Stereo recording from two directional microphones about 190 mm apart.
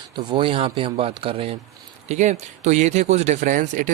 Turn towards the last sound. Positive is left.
turn(degrees=-45)  # may be behind; listen again after turning